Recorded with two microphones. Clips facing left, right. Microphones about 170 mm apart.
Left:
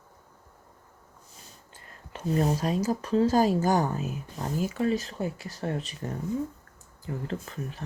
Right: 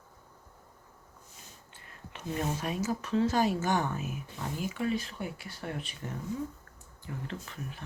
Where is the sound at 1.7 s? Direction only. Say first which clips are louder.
Left 5 dB; 40° left (ahead or behind).